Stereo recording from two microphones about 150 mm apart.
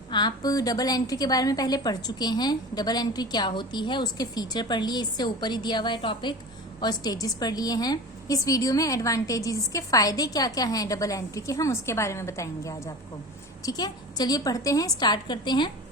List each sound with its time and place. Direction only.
0.1 s a woman's voice: 30° left (ahead or behind)